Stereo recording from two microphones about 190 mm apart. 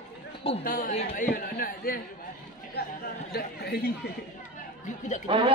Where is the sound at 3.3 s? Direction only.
55° left (ahead or behind).